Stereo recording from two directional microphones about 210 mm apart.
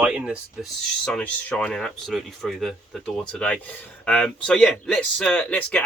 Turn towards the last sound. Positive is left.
turn(degrees=5)  # may be behind; listen again after turning